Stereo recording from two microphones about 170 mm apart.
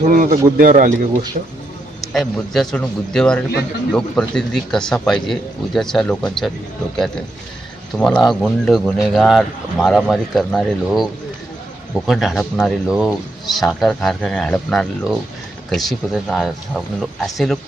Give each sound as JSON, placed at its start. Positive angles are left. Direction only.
{"t": 0.1, "sound": "a man's voice", "side_deg": -55}
{"t": 2.1, "sound": "speech", "side_deg": 0}